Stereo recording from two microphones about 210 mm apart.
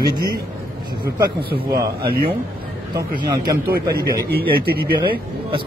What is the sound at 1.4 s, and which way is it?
Speech, 45° right (ahead or behind).